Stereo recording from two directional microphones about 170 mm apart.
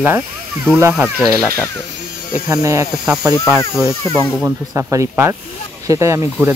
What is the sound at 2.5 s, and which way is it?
Speech, 20° right (ahead or behind).